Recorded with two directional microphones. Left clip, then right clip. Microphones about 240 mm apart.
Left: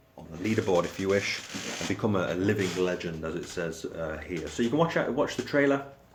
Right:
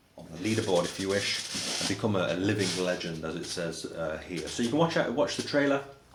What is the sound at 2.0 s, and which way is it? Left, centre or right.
Speech, left.